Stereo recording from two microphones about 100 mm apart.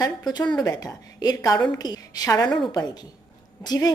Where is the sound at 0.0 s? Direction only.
45° left (ahead or behind).